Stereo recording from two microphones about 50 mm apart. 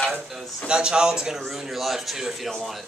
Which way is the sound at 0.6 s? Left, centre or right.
Centre.